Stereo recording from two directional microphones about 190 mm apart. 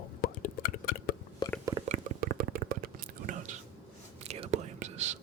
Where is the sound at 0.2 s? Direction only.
55° left (ahead or behind).